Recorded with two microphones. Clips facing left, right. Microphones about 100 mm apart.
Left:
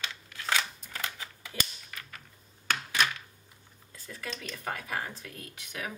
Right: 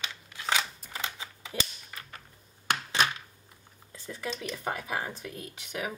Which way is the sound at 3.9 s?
20° right (ahead or behind).